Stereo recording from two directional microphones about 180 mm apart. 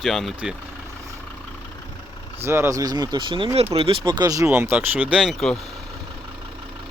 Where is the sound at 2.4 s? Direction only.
15° right (ahead or behind).